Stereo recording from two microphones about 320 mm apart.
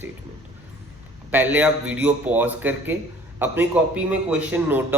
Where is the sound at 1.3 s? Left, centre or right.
Centre.